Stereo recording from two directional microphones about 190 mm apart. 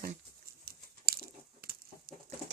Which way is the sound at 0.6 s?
55° right (ahead or behind).